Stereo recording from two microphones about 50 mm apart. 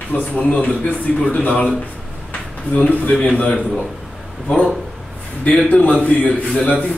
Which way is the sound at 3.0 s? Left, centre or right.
Left.